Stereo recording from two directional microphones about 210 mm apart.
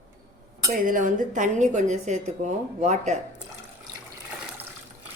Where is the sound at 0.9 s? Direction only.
40° right (ahead or behind).